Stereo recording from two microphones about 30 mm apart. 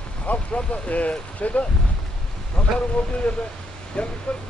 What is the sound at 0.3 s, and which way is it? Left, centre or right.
Speech, left.